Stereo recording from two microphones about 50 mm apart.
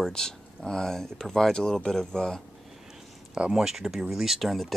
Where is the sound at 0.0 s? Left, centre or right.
Centre.